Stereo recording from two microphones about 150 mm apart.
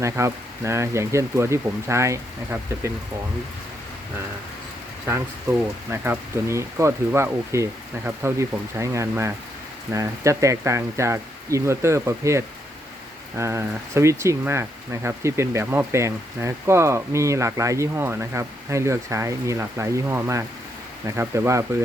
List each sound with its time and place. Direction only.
0.0 s speech: 20° right (ahead or behind)
5.9 s speech: 15° right (ahead or behind)